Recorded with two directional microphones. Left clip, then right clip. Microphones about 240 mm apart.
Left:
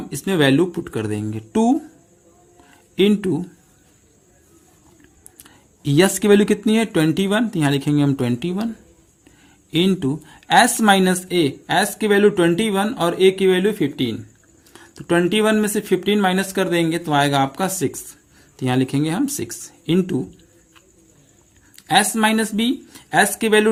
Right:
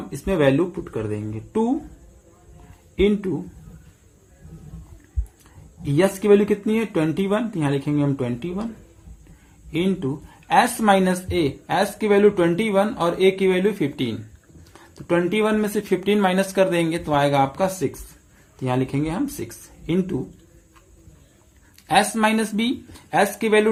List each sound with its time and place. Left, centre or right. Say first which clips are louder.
0.1 s speech: left 2 dB; left
2.9 s speech: left 2 dB; left
5.4 s speech: left 6 dB; left
9.7 s speech: left 4 dB; left
21.8 s speech: left 2 dB; left